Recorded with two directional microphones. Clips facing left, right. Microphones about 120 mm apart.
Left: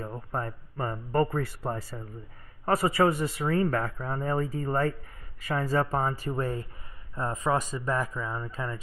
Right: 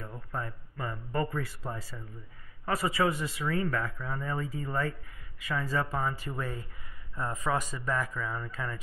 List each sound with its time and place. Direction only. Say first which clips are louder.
0.0 s speech: left 5 dB; 40° left (ahead or behind)
3.4 s a man's voice: left 4 dB; 35° left (ahead or behind)